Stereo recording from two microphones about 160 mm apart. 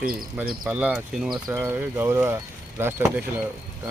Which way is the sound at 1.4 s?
15° right (ahead or behind).